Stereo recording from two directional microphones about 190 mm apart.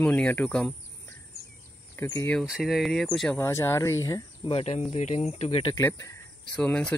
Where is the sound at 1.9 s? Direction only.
15° left (ahead or behind).